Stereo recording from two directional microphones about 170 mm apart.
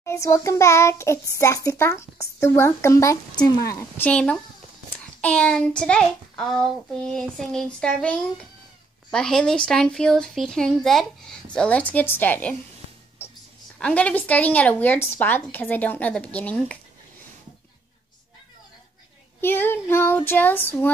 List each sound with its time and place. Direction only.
0.0 s a child's voice: 15° left (ahead or behind)
3.9 s a child's voice: 10° left (ahead or behind)
13.7 s a child's voice: 5° left (ahead or behind)
19.4 s a child's voice: 15° left (ahead or behind)